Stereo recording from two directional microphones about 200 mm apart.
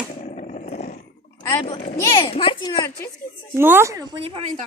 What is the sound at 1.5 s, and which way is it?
A child's voice, 20° left (ahead or behind).